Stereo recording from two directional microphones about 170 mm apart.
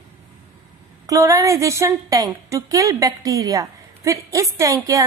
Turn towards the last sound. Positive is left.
turn(degrees=-20)  # may be behind; listen again after turning